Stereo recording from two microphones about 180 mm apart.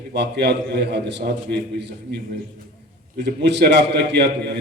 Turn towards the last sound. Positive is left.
turn(degrees=-70)  # may be behind; listen again after turning